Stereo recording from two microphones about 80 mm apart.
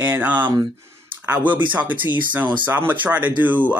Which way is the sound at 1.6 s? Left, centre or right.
Right.